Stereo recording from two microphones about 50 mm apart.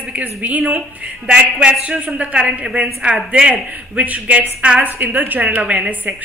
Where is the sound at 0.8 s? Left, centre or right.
Centre.